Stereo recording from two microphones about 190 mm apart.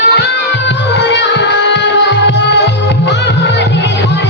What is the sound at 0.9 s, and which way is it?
Music, 65° left (ahead or behind).